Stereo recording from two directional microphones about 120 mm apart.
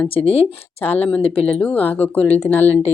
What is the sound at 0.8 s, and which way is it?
Speech, 15° left (ahead or behind).